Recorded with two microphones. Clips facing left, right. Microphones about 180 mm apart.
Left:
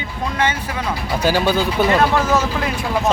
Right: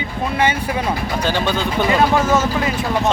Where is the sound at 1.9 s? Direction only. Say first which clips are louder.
Right 3 dB; 5° right (ahead or behind).